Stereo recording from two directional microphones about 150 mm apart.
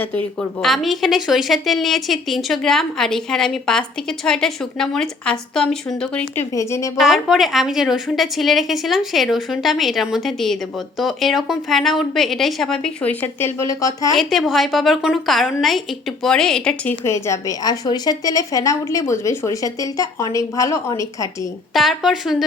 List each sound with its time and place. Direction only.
0.0 s a woman's voice: 10° left (ahead or behind)
6.5 s a woman's voice: 20° left (ahead or behind)
7.0 s a woman's voice: centre (ahead or behind); by 14.1 s 20° left (ahead or behind)
14.2 s a woman's voice: centre (ahead or behind)
17.0 s a woman's voice: 20° left (ahead or behind)
21.7 s a woman's voice: centre (ahead or behind)